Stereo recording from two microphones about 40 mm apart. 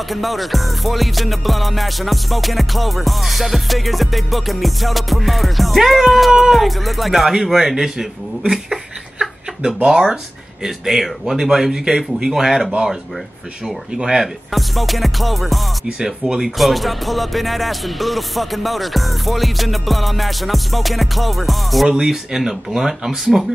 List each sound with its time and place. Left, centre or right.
0.1 s music: centre
6.5 s speech: centre
9.8 s speech: centre
13.9 s speech: centre
14.5 s music: centre
21.8 s speech: centre